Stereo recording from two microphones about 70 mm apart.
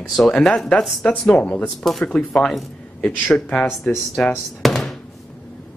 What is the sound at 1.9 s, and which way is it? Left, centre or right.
Speech, centre.